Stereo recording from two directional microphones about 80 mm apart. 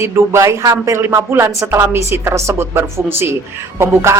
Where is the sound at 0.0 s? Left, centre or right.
Right.